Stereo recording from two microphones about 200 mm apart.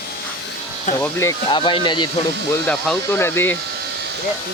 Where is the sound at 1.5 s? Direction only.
25° left (ahead or behind).